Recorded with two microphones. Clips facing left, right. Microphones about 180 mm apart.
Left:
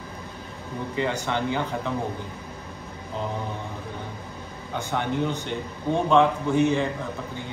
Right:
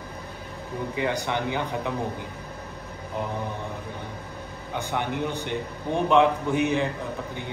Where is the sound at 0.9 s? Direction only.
15° right (ahead or behind).